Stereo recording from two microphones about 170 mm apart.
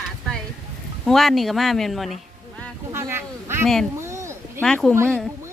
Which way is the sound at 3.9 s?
15° right (ahead or behind).